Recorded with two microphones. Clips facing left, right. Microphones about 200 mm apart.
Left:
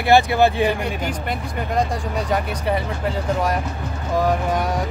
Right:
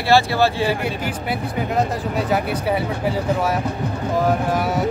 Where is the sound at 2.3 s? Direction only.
5° right (ahead or behind).